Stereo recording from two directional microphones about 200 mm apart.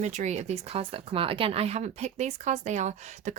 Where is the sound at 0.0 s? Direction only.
35° right (ahead or behind).